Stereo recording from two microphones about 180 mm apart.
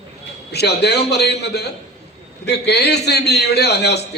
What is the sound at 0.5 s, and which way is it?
A man's voice, 65° left (ahead or behind).